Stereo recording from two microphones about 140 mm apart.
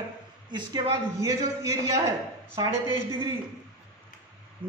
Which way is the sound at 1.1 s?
20° right (ahead or behind).